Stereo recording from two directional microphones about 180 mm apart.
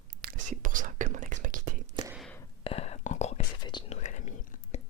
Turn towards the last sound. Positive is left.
turn(degrees=45)  # may be behind; listen again after turning